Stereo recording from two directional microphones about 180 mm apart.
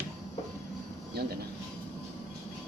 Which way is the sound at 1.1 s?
60° right (ahead or behind).